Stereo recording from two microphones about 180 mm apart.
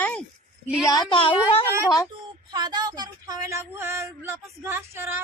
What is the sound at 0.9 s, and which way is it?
Speech, 25° left (ahead or behind).